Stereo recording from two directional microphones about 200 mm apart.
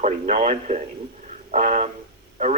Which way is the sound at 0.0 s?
35° right (ahead or behind).